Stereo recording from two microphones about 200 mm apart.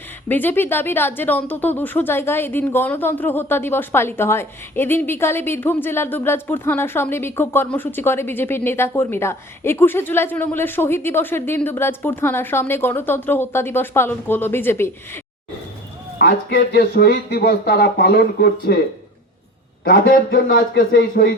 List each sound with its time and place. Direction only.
0.3 s speech: 10° left (ahead or behind)
16.1 s a man's voice: 50° left (ahead or behind)
19.8 s speech: 45° left (ahead or behind)